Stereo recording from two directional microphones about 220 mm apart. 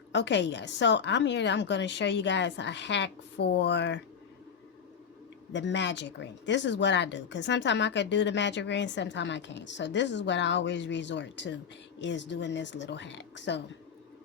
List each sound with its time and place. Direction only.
0.1 s speech: 55° left (ahead or behind)
5.5 s speech: 55° left (ahead or behind)